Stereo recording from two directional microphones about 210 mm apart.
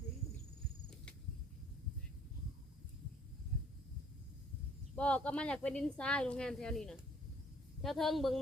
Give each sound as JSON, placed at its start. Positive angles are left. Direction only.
{"t": 4.9, "sound": "speech", "side_deg": 5}